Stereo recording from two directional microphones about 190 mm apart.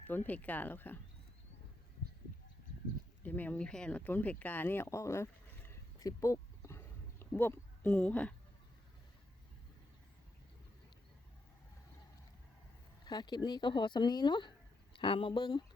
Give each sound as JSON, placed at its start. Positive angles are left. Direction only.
{"t": 0.3, "sound": "speech", "side_deg": 10}
{"t": 3.2, "sound": "speech", "side_deg": 10}
{"t": 13.1, "sound": "speech", "side_deg": 25}